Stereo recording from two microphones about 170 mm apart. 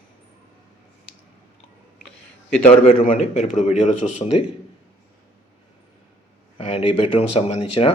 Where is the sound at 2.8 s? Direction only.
40° left (ahead or behind).